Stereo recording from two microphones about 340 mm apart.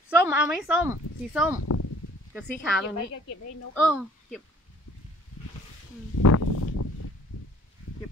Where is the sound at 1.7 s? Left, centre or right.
Left.